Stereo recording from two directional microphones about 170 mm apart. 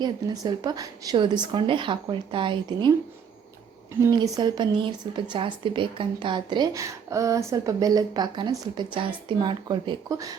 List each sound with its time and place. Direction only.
0.0 s a woman's voice: 25° right (ahead or behind)
4.1 s a woman's voice: 25° right (ahead or behind)